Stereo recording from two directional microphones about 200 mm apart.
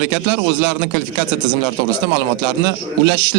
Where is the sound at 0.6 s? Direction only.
65° right (ahead or behind).